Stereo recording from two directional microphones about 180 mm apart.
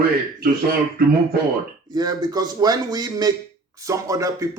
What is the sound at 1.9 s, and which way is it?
Speech, 20° right (ahead or behind).